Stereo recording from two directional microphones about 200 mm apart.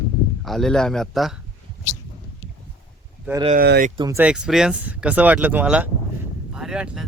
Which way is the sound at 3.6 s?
50° right (ahead or behind).